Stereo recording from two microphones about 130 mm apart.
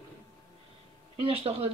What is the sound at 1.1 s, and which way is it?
Speech, 50° right (ahead or behind).